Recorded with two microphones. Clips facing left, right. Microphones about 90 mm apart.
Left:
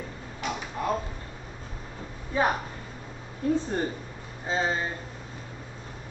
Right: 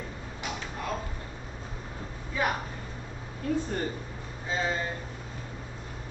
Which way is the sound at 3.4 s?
25° left (ahead or behind).